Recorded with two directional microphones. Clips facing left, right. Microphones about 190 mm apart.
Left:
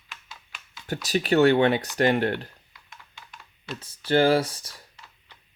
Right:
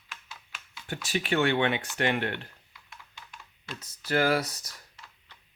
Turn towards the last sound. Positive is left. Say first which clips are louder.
# left 5 dB
turn(degrees=30)  # may be behind; listen again after turning